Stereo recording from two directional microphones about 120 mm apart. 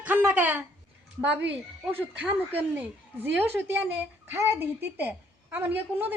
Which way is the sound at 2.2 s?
15° right (ahead or behind).